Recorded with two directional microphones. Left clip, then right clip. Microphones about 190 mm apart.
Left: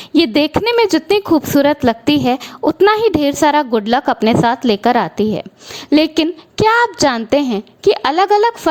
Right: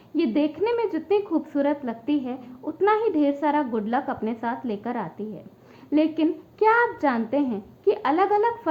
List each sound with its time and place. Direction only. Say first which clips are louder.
0.2 s a woman's voice: left 10 dB; 55° left (ahead or behind)